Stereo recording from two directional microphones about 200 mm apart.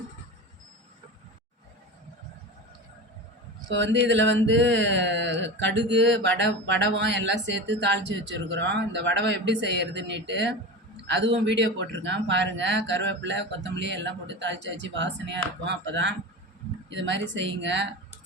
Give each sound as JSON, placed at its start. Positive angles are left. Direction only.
{"t": 3.7, "sound": "speech", "side_deg": -65}